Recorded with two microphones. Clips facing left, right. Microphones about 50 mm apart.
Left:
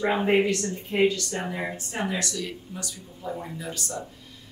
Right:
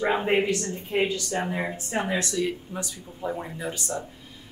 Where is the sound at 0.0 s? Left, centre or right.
Centre.